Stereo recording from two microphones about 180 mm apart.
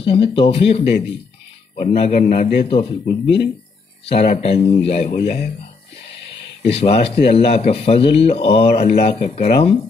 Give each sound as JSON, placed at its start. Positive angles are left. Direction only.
{"t": 0.0, "sound": "speech", "side_deg": 30}
{"t": 6.6, "sound": "speech", "side_deg": 35}